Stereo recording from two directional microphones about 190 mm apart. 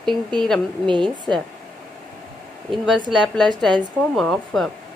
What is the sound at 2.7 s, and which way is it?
A woman's voice, centre (ahead or behind).